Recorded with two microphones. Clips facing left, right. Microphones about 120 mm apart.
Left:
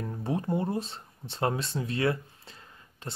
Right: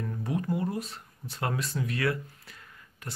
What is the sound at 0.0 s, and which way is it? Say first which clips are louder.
Speech: left 1 dB; 30° left (ahead or behind).